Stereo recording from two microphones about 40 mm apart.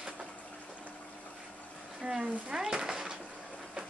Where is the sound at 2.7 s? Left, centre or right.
Centre.